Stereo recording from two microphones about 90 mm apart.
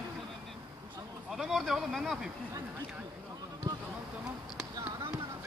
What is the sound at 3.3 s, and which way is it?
Basketball bounce, 45° right (ahead or behind).